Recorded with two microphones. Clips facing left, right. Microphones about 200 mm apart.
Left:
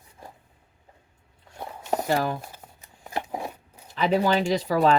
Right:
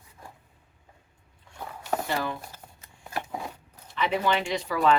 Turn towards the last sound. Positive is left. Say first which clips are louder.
# left 3 dB
turn(degrees=35)  # may be behind; listen again after turning